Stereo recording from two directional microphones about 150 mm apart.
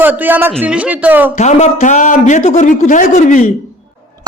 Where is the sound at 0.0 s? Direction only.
10° right (ahead or behind).